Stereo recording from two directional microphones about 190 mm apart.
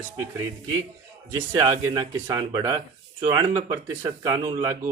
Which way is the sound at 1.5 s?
15° right (ahead or behind).